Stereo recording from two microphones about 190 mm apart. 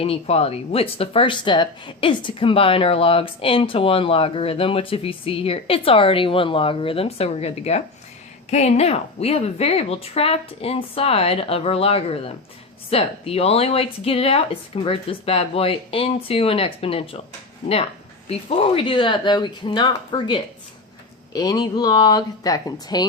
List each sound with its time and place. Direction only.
0.0 s a woman's voice: 30° left (ahead or behind)
18.3 s speech: 30° left (ahead or behind)